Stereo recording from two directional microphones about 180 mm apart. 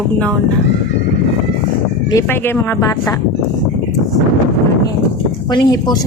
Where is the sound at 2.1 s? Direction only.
15° left (ahead or behind).